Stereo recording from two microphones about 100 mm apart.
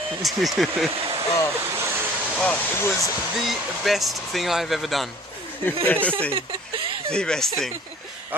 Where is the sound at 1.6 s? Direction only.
25° right (ahead or behind).